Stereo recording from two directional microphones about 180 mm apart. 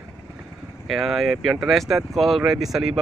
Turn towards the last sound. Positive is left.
turn(degrees=0)  # may be behind; listen again after turning